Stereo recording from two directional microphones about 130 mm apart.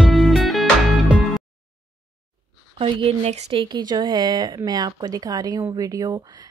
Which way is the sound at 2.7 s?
45° right (ahead or behind).